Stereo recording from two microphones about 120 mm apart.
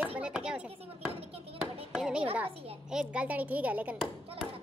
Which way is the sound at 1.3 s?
55° right (ahead or behind).